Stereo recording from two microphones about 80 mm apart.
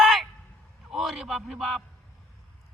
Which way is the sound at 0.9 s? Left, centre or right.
Centre.